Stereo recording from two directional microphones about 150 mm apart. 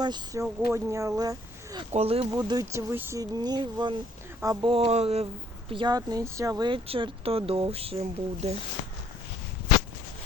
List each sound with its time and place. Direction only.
0.0 s speech: 30° right (ahead or behind)
1.9 s speech: 40° right (ahead or behind)
2.3 s speech: 25° right (ahead or behind)
3.3 s speech: 30° right (ahead or behind)
6.0 s speech: 20° right (ahead or behind); by 8.5 s 45° right (ahead or behind)